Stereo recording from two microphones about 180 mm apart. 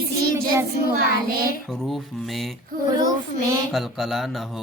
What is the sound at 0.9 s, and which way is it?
Child singing, 55° right (ahead or behind).